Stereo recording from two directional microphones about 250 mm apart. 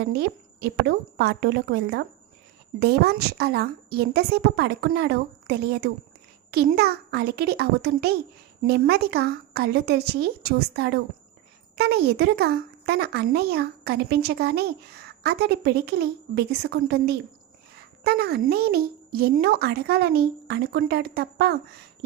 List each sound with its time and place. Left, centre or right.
0.1 s speech: right